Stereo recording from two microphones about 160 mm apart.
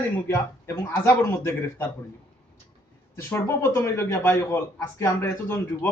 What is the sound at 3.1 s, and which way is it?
A man's voice, 15° left (ahead or behind).